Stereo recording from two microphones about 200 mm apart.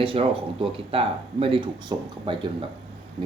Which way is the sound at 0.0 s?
25° right (ahead or behind).